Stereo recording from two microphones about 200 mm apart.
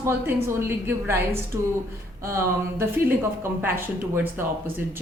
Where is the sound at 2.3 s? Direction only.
15° right (ahead or behind).